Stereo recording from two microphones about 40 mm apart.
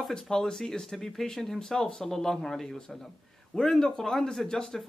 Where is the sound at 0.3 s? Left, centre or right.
Centre.